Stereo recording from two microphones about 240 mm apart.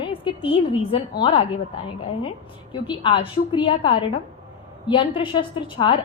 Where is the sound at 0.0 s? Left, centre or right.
Left.